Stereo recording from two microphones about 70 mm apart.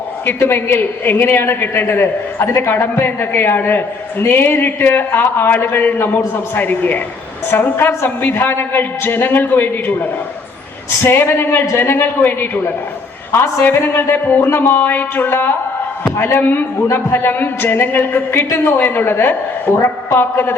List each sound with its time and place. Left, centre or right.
0.3 s a woman's voice: left
13.7 s a woman's voice: left